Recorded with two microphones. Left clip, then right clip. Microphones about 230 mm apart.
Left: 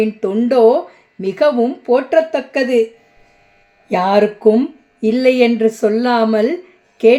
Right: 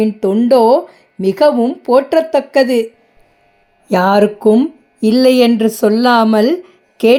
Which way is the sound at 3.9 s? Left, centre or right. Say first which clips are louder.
Right 2 dB; right.